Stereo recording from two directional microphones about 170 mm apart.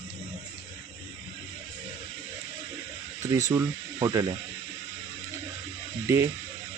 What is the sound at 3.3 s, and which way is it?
Speech, 20° right (ahead or behind).